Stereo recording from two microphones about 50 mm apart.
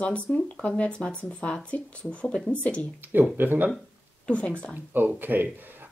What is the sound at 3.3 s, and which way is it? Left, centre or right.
Speech, right.